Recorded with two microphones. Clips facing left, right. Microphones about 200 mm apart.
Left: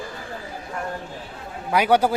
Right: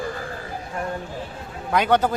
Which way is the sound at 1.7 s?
10° left (ahead or behind).